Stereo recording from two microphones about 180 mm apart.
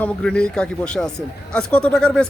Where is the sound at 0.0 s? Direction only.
5° left (ahead or behind).